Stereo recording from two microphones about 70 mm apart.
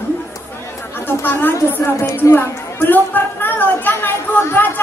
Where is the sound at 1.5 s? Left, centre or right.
Left.